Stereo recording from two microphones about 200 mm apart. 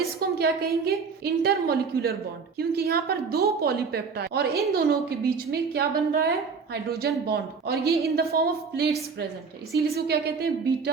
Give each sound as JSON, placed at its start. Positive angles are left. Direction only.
{"t": 0.2, "sound": "a woman's voice", "side_deg": -50}